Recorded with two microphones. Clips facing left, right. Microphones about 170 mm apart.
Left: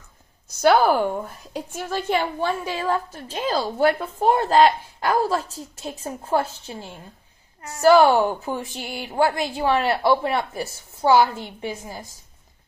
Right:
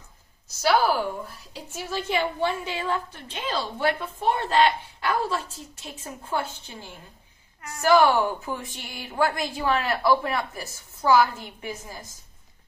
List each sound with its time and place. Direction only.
0.5 s a woman's voice: 55° left (ahead or behind); by 12.0 s 30° left (ahead or behind)